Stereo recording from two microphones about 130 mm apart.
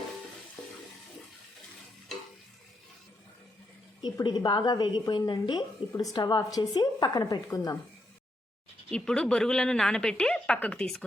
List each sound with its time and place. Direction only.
4.0 s a woman's voice: 35° left (ahead or behind)
8.9 s a woman's voice: 5° left (ahead or behind)